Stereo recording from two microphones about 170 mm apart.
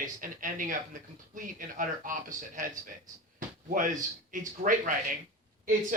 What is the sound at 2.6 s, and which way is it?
Speech, 50° right (ahead or behind).